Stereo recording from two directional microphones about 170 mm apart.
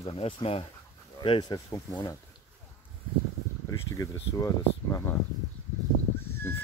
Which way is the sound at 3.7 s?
20° left (ahead or behind).